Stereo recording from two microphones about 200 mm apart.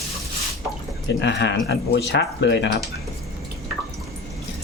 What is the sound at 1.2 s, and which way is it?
Speech, 60° left (ahead or behind).